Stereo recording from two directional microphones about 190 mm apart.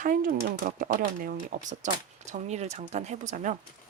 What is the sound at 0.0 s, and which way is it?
Speech, 45° right (ahead or behind).